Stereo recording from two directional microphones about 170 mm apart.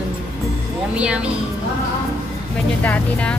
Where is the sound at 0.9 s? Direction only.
5° right (ahead or behind).